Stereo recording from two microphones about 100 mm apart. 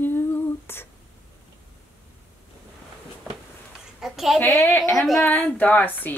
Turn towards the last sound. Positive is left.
turn(degrees=15)  # may be behind; listen again after turning